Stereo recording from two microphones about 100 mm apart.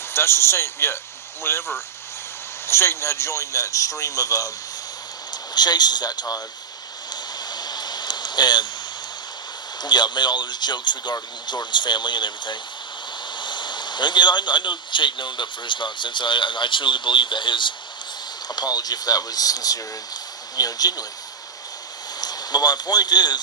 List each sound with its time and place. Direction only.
0.1 s speech: 25° left (ahead or behind)
2.6 s a man's voice: 25° left (ahead or behind)
7.1 s a sound: 45° left (ahead or behind)
9.8 s a man's voice: 45° left (ahead or behind)
22.2 s a man's voice: 40° left (ahead or behind)